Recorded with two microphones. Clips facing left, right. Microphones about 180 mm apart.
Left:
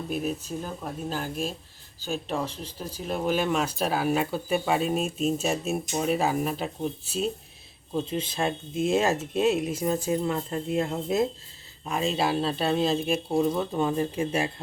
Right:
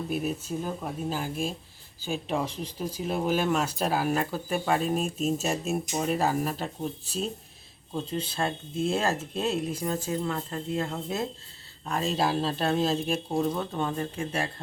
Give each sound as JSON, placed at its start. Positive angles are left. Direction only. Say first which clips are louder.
{"t": 0.1, "sound": "speech", "louder": "left 2 dB", "side_deg": -5}
{"t": 8.1, "sound": "speech", "louder": "right 1 dB", "side_deg": 15}